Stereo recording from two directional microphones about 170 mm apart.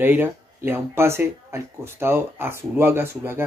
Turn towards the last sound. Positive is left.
turn(degrees=-15)  # may be behind; listen again after turning